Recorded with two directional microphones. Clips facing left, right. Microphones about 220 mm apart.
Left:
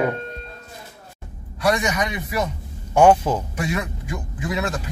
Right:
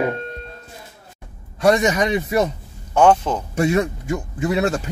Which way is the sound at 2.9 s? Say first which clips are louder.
Even; 10° left (ahead or behind).